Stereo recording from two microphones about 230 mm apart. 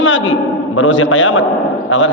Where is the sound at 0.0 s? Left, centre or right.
Left.